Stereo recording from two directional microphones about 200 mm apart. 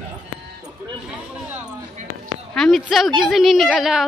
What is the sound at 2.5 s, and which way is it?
A woman's voice, centre (ahead or behind).